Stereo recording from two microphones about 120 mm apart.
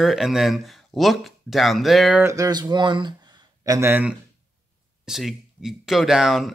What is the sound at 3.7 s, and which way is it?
Speech, 20° right (ahead or behind).